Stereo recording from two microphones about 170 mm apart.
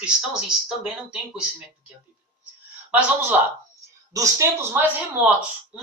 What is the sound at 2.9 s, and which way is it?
Speech, 10° right (ahead or behind).